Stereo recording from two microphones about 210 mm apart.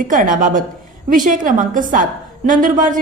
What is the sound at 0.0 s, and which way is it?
A woman's voice, 40° right (ahead or behind).